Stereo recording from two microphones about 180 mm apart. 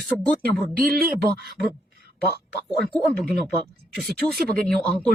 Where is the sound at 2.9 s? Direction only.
Centre (ahead or behind).